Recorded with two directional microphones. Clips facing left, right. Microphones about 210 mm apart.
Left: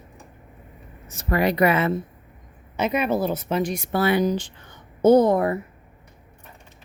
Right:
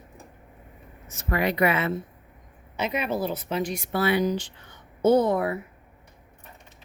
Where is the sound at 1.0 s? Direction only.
35° left (ahead or behind).